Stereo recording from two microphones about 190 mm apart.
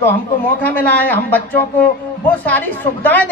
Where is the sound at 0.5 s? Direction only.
10° left (ahead or behind).